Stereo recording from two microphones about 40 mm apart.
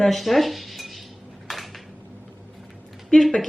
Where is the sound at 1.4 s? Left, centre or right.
Centre.